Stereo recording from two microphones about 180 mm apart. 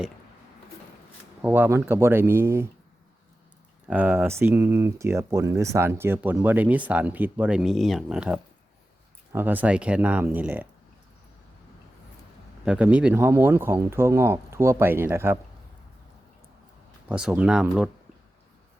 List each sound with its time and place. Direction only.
1.4 s speech: 10° right (ahead or behind)
3.8 s speech: 10° right (ahead or behind)
12.6 s speech: 5° right (ahead or behind)
17.1 s speech: 5° right (ahead or behind)